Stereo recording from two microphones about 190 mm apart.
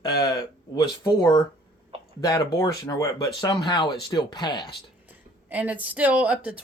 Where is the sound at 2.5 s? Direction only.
20° left (ahead or behind).